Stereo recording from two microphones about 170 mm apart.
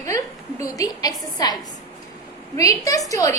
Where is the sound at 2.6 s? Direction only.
20° left (ahead or behind).